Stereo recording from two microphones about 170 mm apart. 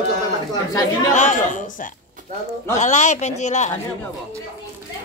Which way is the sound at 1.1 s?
45° left (ahead or behind).